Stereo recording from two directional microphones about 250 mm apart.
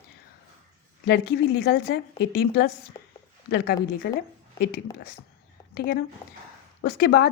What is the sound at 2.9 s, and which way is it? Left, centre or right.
Speech, left.